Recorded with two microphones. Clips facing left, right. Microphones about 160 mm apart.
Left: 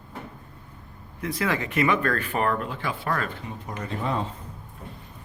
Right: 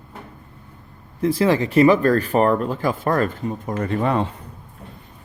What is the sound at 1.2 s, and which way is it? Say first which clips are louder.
Speech: right 9 dB; 30° right (ahead or behind).